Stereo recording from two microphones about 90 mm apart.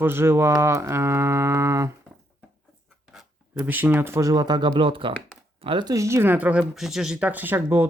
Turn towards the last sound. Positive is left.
turn(degrees=-25)  # may be behind; listen again after turning